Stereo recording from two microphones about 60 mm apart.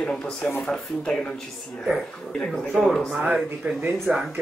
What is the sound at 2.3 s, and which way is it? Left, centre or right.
Speech, centre.